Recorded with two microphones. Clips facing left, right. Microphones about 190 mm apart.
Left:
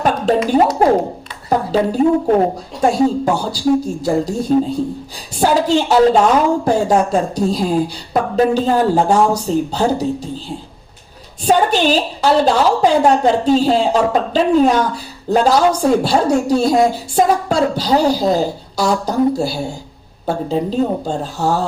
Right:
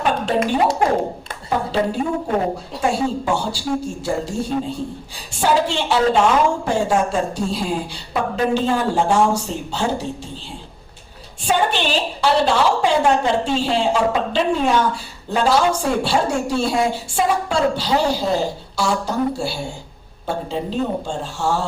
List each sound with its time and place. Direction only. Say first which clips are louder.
0.4 s a woman's voice: left 6 dB; 40° left (ahead or behind)
11.4 s a woman's voice: left 6 dB; 40° left (ahead or behind)